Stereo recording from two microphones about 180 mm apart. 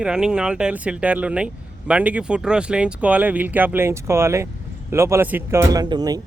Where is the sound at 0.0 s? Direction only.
5° right (ahead or behind).